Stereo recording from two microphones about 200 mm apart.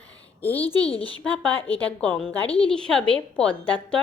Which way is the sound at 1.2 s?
5° left (ahead or behind).